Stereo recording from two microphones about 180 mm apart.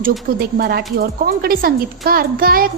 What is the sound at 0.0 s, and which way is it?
A woman's voice, 55° right (ahead or behind).